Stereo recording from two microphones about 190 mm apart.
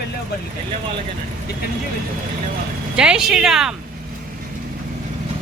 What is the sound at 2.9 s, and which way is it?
Speech, 5° right (ahead or behind).